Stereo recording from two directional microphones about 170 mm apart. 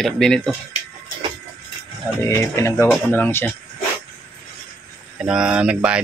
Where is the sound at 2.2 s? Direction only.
15° left (ahead or behind).